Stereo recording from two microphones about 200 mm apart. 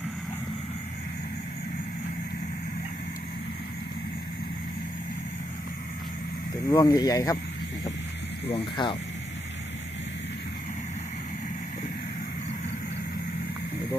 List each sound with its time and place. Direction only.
6.7 s speech: 20° left (ahead or behind)
8.4 s speech: 25° left (ahead or behind)